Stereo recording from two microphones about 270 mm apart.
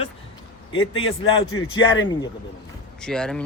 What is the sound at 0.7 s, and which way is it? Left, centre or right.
A man's voice, left.